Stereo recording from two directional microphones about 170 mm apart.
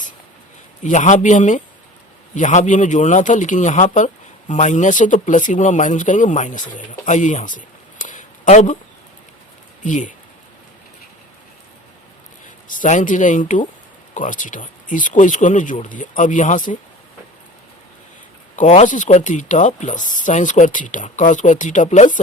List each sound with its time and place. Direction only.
0.8 s speech: 45° left (ahead or behind)
9.8 s speech: 45° left (ahead or behind)
12.6 s speech: 50° left (ahead or behind)
18.5 s speech: 45° left (ahead or behind)